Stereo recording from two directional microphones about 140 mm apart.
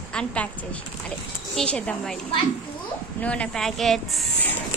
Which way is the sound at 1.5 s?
10° left (ahead or behind).